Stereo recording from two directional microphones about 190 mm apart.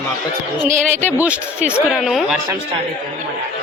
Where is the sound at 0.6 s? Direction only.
40° right (ahead or behind).